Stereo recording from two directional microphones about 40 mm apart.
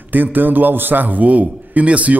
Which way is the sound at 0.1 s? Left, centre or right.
Right.